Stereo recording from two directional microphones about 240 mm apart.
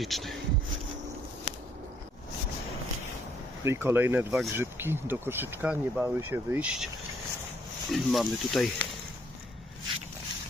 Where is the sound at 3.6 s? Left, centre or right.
Centre.